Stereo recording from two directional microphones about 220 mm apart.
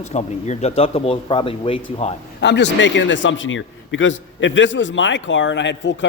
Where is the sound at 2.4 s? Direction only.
50° left (ahead or behind).